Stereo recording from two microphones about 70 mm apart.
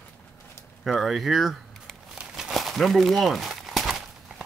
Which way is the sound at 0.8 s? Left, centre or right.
Centre.